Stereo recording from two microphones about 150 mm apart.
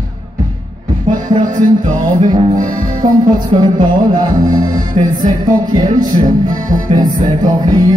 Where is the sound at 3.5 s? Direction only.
45° right (ahead or behind).